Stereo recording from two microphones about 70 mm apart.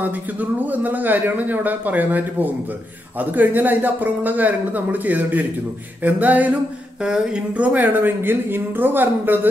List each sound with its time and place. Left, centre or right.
0.0 s speech: right
7.0 s speech: centre; by 9.5 s right